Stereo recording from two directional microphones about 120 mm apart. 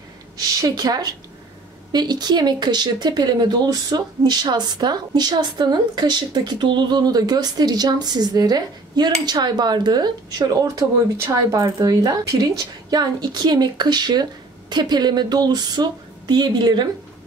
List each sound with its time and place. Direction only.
0.4 s a woman's voice: 30° right (ahead or behind)